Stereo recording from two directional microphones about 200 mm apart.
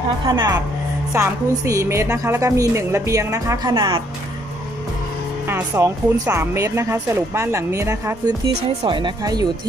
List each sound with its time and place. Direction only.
0.3 s speech: 20° right (ahead or behind)
5.5 s speech: 15° right (ahead or behind)